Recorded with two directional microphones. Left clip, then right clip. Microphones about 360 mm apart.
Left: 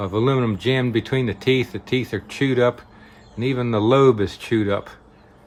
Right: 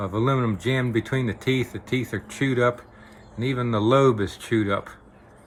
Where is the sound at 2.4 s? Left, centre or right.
Centre.